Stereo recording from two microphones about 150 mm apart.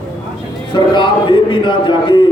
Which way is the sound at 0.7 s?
35° left (ahead or behind).